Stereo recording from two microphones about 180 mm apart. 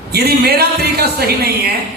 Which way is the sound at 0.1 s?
60° right (ahead or behind).